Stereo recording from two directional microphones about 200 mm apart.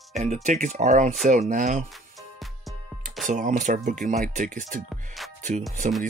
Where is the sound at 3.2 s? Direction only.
40° right (ahead or behind).